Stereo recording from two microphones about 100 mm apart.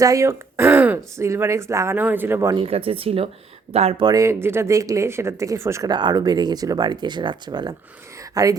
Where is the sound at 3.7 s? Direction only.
90° right.